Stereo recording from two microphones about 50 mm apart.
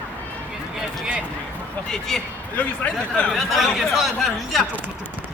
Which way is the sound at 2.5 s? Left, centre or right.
Left.